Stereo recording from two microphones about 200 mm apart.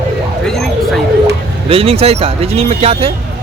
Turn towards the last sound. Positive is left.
turn(degrees=-30)  # may be behind; listen again after turning